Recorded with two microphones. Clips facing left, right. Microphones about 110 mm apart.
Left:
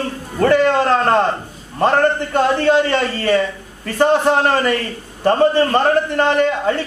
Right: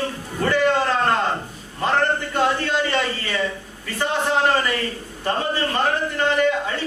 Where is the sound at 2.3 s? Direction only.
60° left (ahead or behind).